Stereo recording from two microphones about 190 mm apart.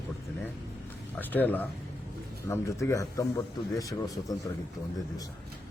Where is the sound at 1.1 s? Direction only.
10° left (ahead or behind).